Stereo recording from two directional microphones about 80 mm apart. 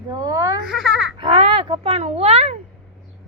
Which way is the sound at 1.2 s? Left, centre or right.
Right.